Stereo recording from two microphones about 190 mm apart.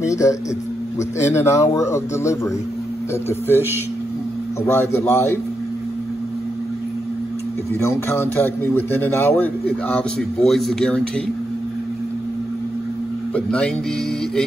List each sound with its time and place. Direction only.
0.0 s a man's voice: 15° left (ahead or behind)
4.7 s a man's voice: 10° left (ahead or behind)
7.8 s a man's voice: 15° left (ahead or behind)
13.3 s speech: 5° left (ahead or behind)